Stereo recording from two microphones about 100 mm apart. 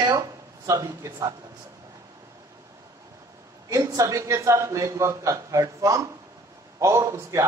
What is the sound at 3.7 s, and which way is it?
A man's voice, 35° right (ahead or behind).